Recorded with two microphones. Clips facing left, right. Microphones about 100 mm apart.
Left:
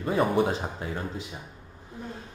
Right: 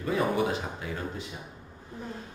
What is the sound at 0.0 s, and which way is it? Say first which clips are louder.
Speech: left 3 dB; 30° left (ahead or behind).